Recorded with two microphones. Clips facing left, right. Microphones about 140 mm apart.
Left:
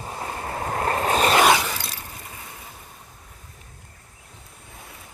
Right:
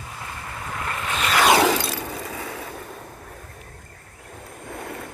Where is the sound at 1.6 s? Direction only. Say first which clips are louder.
Right 10 dB; 90° right.